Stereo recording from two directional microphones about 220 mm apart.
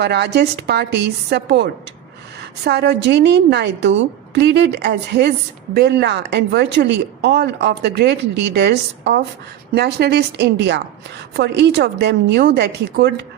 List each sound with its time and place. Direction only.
0.0 s speech: 50° right (ahead or behind)